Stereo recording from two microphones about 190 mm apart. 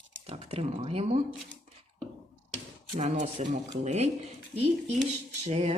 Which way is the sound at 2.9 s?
35° right (ahead or behind).